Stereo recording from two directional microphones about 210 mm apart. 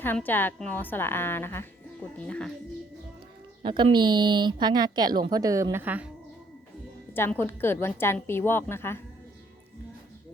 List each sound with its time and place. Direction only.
0.0 s a woman's voice: 10° left (ahead or behind)
3.6 s a woman's voice: 20° right (ahead or behind)
7.1 s a woman's voice: 10° left (ahead or behind)